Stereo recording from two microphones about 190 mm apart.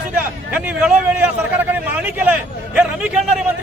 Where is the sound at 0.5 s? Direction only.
5° right (ahead or behind).